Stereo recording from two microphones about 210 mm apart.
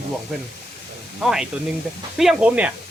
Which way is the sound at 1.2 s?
Centre (ahead or behind).